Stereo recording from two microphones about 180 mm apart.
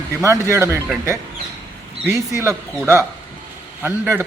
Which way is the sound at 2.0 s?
15° right (ahead or behind).